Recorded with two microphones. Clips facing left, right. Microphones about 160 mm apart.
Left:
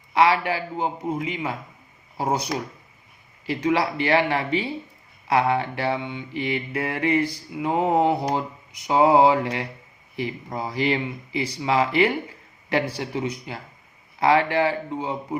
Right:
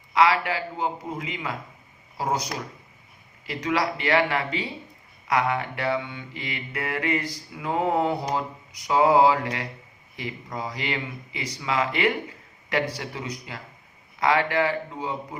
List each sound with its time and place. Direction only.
0.1 s mantra: 30° left (ahead or behind)